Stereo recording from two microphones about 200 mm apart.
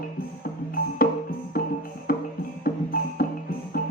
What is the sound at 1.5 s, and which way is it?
Music, 45° left (ahead or behind).